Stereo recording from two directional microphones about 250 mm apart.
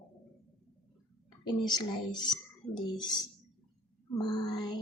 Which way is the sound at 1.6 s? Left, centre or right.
Centre.